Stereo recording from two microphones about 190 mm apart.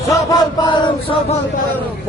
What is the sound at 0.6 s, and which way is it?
Chant, 25° left (ahead or behind).